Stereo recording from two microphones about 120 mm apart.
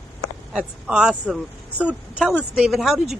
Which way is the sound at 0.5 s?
5° right (ahead or behind).